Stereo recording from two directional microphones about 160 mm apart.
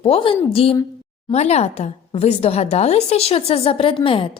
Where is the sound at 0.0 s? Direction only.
35° left (ahead or behind).